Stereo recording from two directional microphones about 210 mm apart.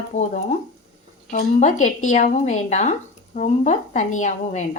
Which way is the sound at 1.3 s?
35° left (ahead or behind).